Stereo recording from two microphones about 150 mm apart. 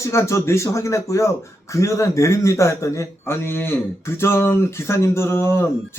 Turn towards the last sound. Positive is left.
turn(degrees=15)  # may be behind; listen again after turning